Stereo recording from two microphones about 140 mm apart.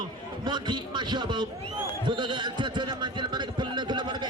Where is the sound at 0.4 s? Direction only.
35° right (ahead or behind).